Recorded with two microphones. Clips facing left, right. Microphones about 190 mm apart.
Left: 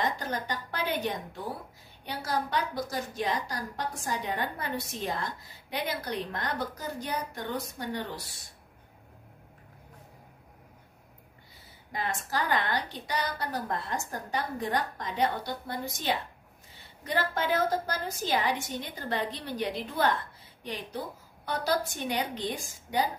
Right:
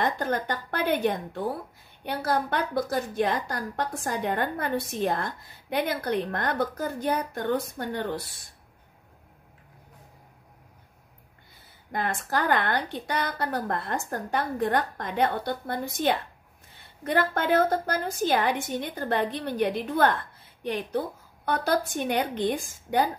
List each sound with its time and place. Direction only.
0.0 s a woman's voice: 55° right (ahead or behind)
11.9 s a woman's voice: 55° right (ahead or behind)